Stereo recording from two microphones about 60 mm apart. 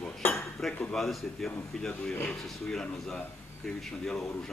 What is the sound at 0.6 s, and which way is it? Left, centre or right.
Dishes, centre.